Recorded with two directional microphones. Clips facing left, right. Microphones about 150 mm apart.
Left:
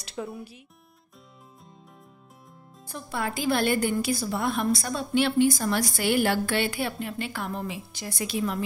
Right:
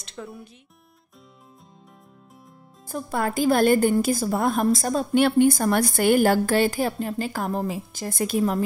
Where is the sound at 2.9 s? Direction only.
45° right (ahead or behind).